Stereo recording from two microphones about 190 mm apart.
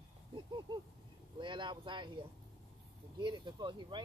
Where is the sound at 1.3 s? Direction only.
25° right (ahead or behind).